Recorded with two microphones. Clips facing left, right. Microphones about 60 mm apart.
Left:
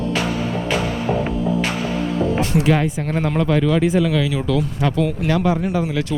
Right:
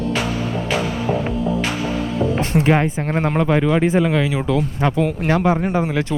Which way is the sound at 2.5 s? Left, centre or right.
Right.